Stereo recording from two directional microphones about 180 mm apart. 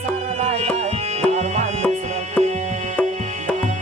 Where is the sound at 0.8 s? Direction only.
35° right (ahead or behind).